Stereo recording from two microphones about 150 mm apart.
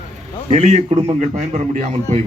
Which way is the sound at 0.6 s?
50° right (ahead or behind).